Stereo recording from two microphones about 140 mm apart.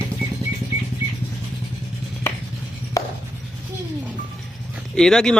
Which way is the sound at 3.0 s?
25° left (ahead or behind).